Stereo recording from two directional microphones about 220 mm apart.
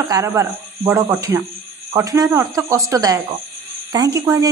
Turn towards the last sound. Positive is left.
turn(degrees=-15)  # may be behind; listen again after turning